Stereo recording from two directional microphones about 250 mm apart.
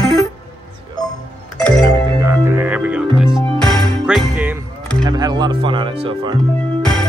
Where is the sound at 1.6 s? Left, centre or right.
Centre.